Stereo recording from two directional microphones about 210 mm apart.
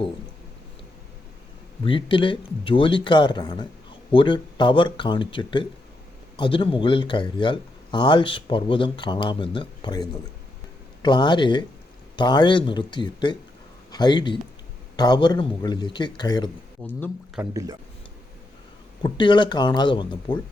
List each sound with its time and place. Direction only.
1.8 s speech: 25° left (ahead or behind)
16.8 s speech: 5° left (ahead or behind)
17.5 s speech: 15° right (ahead or behind)
19.0 s speech: 20° left (ahead or behind)